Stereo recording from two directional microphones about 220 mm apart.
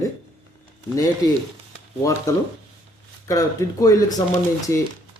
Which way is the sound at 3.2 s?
15° left (ahead or behind).